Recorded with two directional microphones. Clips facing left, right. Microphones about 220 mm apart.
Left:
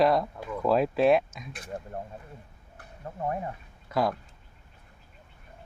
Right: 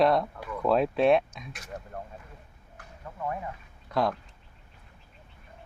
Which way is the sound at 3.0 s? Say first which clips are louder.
Left 2 dB; 35° left (ahead or behind).